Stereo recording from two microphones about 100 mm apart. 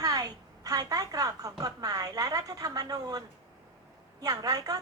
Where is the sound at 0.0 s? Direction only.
40° right (ahead or behind).